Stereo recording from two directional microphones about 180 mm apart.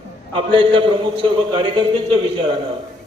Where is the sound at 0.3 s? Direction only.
30° right (ahead or behind).